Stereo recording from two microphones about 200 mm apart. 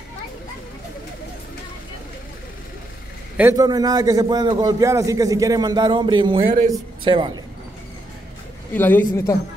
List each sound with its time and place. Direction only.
3.3 s a man's voice: 15° right (ahead or behind)
8.7 s a man's voice: 10° left (ahead or behind)